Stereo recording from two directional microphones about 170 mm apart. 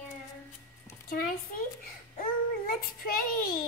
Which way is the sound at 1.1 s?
55° left (ahead or behind).